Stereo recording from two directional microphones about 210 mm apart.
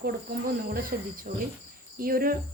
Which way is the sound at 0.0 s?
45° right (ahead or behind).